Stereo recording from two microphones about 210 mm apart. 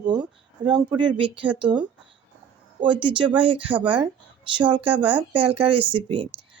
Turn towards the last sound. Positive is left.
turn(degrees=-25)  # may be behind; listen again after turning